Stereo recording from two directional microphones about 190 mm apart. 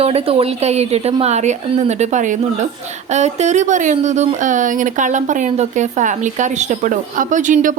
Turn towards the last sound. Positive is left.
turn(degrees=-40)  # may be behind; listen again after turning